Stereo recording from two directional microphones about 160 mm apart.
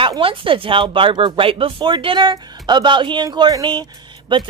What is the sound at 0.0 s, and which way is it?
Speech, 35° right (ahead or behind).